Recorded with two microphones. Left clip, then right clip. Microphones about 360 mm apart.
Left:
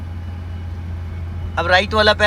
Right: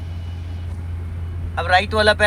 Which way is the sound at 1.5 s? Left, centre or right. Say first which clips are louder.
Left 2 dB; centre.